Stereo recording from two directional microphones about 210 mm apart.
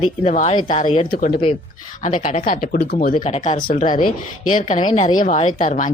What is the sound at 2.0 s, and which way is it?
A woman's voice, 35° left (ahead or behind).